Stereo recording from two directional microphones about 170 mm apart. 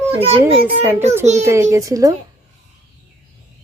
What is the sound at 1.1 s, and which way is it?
Speech, 40° right (ahead or behind).